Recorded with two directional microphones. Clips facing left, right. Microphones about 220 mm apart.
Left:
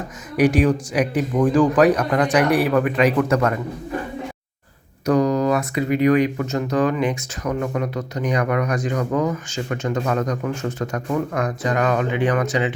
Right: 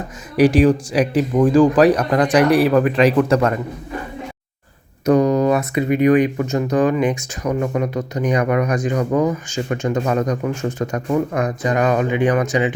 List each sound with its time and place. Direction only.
0.3 s speech: 30° right (ahead or behind)
5.0 s speech: 20° right (ahead or behind)